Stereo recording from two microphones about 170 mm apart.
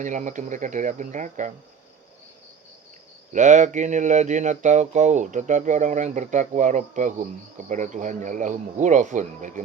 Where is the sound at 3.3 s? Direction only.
45° right (ahead or behind).